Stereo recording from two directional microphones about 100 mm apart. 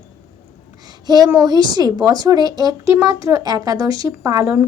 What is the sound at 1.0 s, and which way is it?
A child's voice, 40° right (ahead or behind).